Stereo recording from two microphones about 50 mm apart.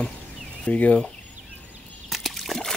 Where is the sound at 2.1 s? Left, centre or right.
Centre.